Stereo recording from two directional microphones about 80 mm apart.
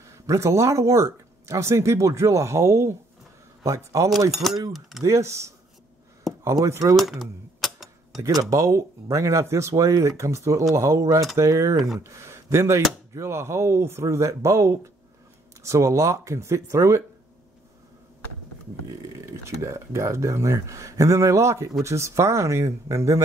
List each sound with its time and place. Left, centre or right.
0.0 s speech: right
4.3 s speech: centre
5.0 s speech: right
6.3 s a sound: centre
7.0 s typewriter: centre
8.2 s speech: right
18.9 s speech: right